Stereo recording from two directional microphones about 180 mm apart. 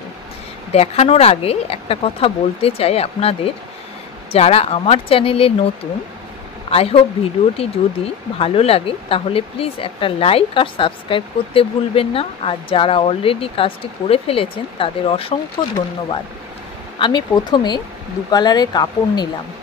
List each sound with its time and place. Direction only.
0.7 s speech: 35° left (ahead or behind)
6.7 s a woman's voice: 35° left (ahead or behind)